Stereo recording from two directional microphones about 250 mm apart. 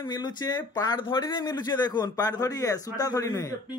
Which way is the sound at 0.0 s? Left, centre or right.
Centre.